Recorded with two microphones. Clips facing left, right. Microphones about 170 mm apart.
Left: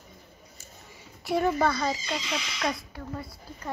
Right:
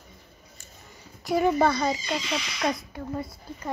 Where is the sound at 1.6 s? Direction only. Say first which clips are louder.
Right 3 dB; 20° right (ahead or behind).